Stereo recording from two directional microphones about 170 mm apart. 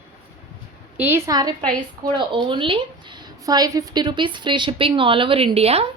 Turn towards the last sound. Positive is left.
turn(degrees=-35)  # may be behind; listen again after turning